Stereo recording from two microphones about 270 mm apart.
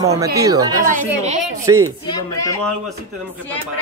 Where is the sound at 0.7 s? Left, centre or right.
Right.